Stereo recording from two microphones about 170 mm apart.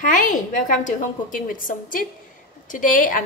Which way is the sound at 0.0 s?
50° left (ahead or behind).